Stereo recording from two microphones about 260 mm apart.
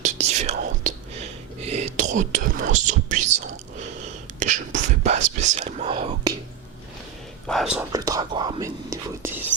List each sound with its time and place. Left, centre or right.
0.0 s whispering: right
4.4 s speech: right
7.4 s speech: centre
7.9 s speech: centre